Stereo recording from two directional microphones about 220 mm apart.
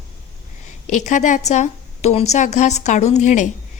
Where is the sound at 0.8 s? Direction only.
35° left (ahead or behind).